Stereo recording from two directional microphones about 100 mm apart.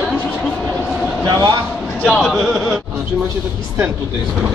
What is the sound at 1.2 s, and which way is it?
Speech, 45° right (ahead or behind).